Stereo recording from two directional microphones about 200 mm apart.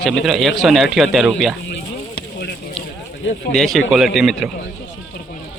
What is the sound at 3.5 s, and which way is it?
Speech, centre (ahead or behind).